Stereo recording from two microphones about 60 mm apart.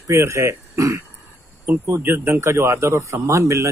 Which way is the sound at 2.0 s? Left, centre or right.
Right.